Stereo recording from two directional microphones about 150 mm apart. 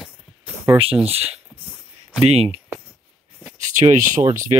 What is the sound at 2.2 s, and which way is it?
Speech, 40° right (ahead or behind).